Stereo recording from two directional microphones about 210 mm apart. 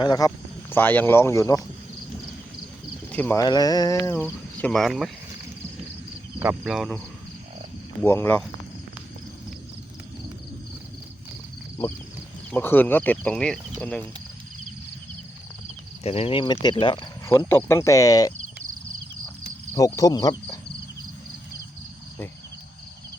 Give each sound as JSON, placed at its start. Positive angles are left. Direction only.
{"t": 0.0, "sound": "speech", "side_deg": 20}
{"t": 3.1, "sound": "speech", "side_deg": 10}
{"t": 6.4, "sound": "speech", "side_deg": -5}
{"t": 8.0, "sound": "speech", "side_deg": 10}
{"t": 12.5, "sound": "speech", "side_deg": 10}
{"t": 16.0, "sound": "speech", "side_deg": 30}
{"t": 17.2, "sound": "speech", "side_deg": 10}
{"t": 19.7, "sound": "speech", "side_deg": 15}